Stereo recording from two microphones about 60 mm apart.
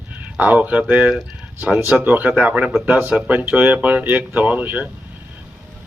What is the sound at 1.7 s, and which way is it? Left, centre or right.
Speech, right.